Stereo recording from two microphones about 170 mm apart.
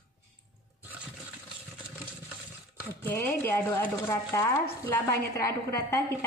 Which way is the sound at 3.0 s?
15° left (ahead or behind).